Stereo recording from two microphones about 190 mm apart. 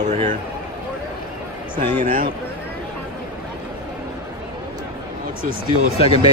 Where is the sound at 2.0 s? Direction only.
45° right (ahead or behind).